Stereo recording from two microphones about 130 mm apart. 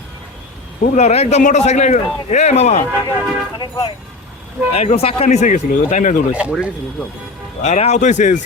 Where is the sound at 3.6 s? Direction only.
35° left (ahead or behind).